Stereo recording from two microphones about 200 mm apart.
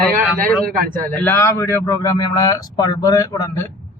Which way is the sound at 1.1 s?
10° left (ahead or behind).